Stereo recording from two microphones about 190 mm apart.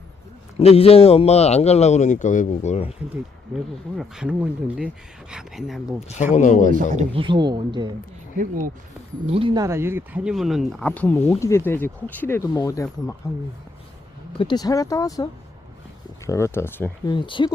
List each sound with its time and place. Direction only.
0.6 s a man's voice: 30° left (ahead or behind)
3.9 s speech: 5° right (ahead or behind)
6.3 s a man's voice: 40° left (ahead or behind)
6.9 s speech: 30° right (ahead or behind)
8.4 s speech: 45° right (ahead or behind)
9.2 s speech: 30° right (ahead or behind)
9.6 s speech: 15° right (ahead or behind); by 13.1 s 15° left (ahead or behind)
14.3 s speech: 20° left (ahead or behind)
17.1 s speech: 25° left (ahead or behind)